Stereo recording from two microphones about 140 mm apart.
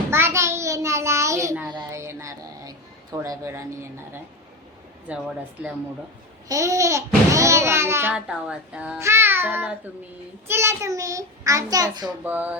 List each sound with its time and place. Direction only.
0.1 s child singing: 15° right (ahead or behind)
1.9 s a sound: 20° right (ahead or behind)
5.1 s a child's voice: 10° right (ahead or behind)
6.5 s a child's voice: 20° right (ahead or behind)
8.1 s a child's voice: 5° right (ahead or behind); by 12.1 s 30° right (ahead or behind)
12.2 s a child's voice: 10° right (ahead or behind)